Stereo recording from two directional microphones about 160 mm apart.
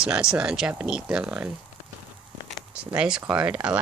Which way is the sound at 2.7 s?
10° right (ahead or behind).